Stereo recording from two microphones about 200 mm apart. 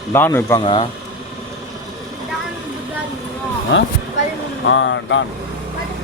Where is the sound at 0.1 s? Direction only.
10° left (ahead or behind).